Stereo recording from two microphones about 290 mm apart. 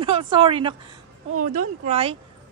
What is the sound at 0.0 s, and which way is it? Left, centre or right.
Speech, centre.